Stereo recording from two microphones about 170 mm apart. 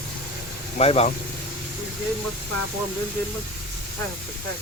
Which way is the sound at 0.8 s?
35° left (ahead or behind).